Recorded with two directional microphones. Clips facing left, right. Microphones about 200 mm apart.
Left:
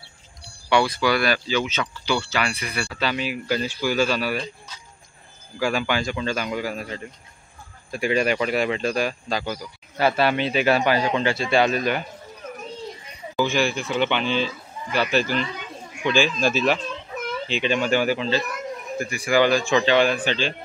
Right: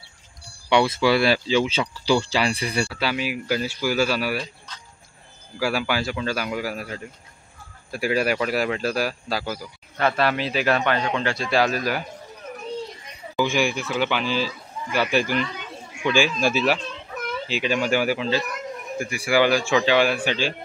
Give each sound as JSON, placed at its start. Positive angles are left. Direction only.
{"t": 0.7, "sound": "speech", "side_deg": -25}
{"t": 2.9, "sound": "speech", "side_deg": -10}
{"t": 5.6, "sound": "a man's voice", "side_deg": -5}
{"t": 13.4, "sound": "a man's voice", "side_deg": -15}